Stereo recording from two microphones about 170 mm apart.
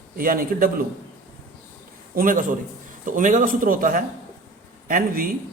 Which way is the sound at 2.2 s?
55° right (ahead or behind).